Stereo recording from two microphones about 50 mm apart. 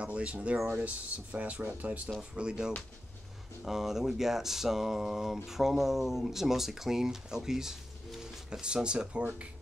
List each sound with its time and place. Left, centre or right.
0.0 s speech: right
3.6 s speech: centre